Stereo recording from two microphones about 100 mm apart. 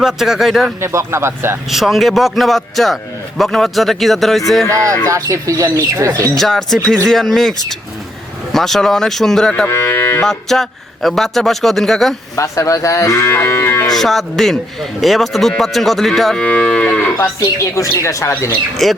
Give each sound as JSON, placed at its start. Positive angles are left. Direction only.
{"t": 0.0, "sound": "a man's voice", "side_deg": -5}
{"t": 0.8, "sound": "speech", "side_deg": -25}
{"t": 1.7, "sound": "a man's voice", "side_deg": 0}
{"t": 5.0, "sound": "speech", "side_deg": -35}
{"t": 6.3, "sound": "a man's voice", "side_deg": 5}
{"t": 9.6, "sound": "cattle", "side_deg": 30}
{"t": 10.2, "sound": "a man's voice", "side_deg": 5}
{"t": 12.4, "sound": "moo", "side_deg": 30}
{"t": 13.9, "sound": "a man's voice", "side_deg": 5}
{"t": 17.2, "sound": "moo", "side_deg": 30}
{"t": 18.8, "sound": "a man's voice", "side_deg": 0}